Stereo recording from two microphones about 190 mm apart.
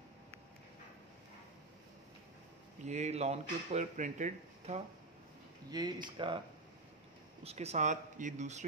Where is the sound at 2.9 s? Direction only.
35° right (ahead or behind).